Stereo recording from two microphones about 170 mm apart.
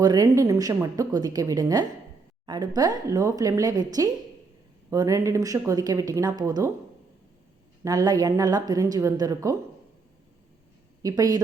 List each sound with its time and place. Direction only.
0.0 s a woman's voice: 20° right (ahead or behind)
7.9 s a woman's voice: 20° right (ahead or behind)
11.0 s a woman's voice: 20° right (ahead or behind)